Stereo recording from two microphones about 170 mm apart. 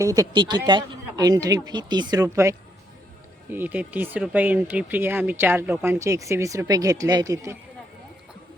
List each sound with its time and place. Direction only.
0.0 s speech: 20° right (ahead or behind)